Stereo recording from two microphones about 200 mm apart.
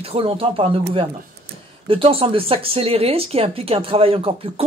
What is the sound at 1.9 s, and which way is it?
Speech, 25° right (ahead or behind).